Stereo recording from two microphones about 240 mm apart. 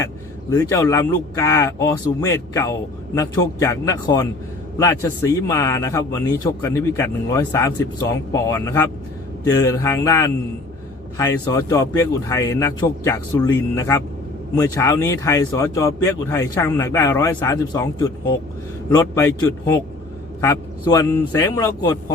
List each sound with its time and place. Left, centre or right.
0.5 s speech: centre